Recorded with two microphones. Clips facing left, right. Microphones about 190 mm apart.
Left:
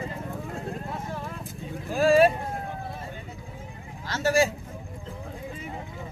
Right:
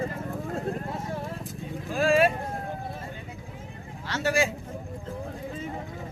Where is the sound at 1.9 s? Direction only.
35° left (ahead or behind).